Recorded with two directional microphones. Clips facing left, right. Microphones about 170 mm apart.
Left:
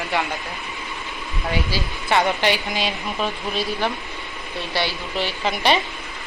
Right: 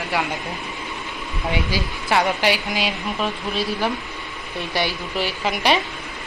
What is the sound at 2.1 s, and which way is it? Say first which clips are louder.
Speech: even; 5° right (ahead or behind).